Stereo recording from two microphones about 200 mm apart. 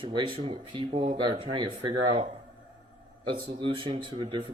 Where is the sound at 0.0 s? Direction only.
25° right (ahead or behind).